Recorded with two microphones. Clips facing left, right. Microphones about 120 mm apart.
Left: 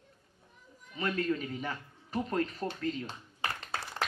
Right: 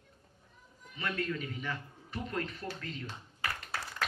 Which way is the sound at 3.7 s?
25° left (ahead or behind).